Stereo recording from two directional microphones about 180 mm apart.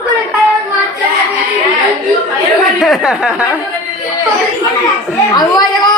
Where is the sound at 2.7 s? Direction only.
Centre (ahead or behind).